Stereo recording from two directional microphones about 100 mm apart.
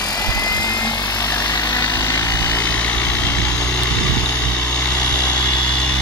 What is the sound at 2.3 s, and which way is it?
Vehicle, 20° left (ahead or behind).